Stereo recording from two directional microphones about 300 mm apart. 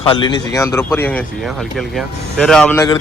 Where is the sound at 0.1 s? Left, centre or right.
Centre.